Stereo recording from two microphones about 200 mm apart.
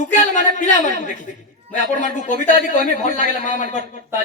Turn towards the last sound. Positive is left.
turn(degrees=40)  # may be behind; listen again after turning